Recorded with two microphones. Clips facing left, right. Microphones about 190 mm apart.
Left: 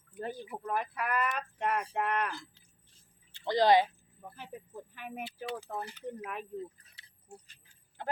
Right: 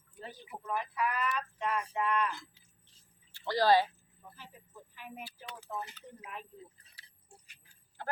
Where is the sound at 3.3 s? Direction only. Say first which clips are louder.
Left 2 dB; 20° left (ahead or behind).